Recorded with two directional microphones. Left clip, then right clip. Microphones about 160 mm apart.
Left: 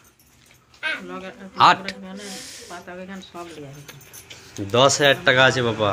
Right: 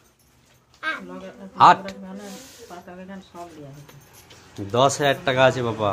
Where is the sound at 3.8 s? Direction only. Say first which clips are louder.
Left 6 dB; 10° right (ahead or behind).